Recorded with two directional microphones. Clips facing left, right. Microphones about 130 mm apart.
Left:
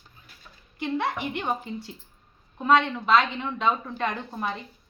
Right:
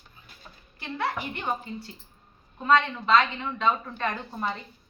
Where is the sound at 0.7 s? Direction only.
15° left (ahead or behind).